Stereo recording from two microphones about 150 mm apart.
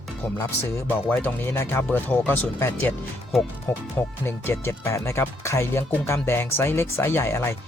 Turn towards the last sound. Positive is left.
turn(degrees=15)  # may be behind; listen again after turning